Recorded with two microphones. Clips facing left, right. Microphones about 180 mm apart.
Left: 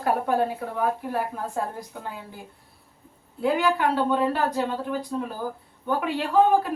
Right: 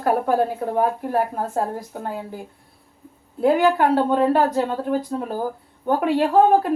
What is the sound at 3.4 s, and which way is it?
A woman's voice, 45° right (ahead or behind).